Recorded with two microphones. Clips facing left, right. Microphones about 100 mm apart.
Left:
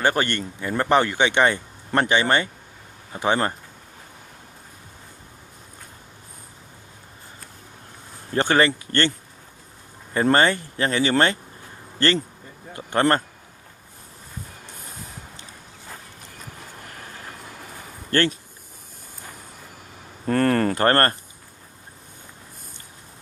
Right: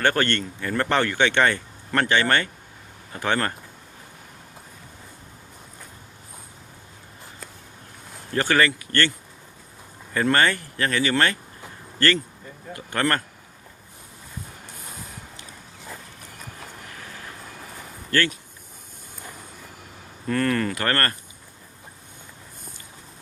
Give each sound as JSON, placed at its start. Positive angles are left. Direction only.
{"t": 0.0, "sound": "speech", "side_deg": 15}
{"t": 8.3, "sound": "speech", "side_deg": 25}
{"t": 10.2, "sound": "speech", "side_deg": 25}
{"t": 18.1, "sound": "speech", "side_deg": 30}
{"t": 20.2, "sound": "a sound", "side_deg": 40}